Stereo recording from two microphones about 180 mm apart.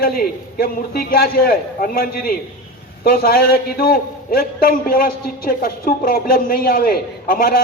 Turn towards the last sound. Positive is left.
turn(degrees=55)  # may be behind; listen again after turning